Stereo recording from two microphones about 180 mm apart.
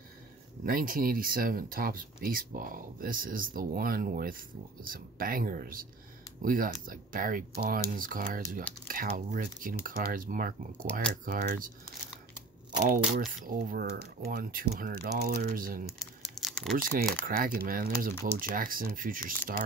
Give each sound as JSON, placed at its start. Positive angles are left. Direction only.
{"t": 0.7, "sound": "speech", "side_deg": -50}
{"t": 12.7, "sound": "speech", "side_deg": -45}
{"t": 16.3, "sound": "typing", "side_deg": 0}
{"t": 16.7, "sound": "speech", "side_deg": -50}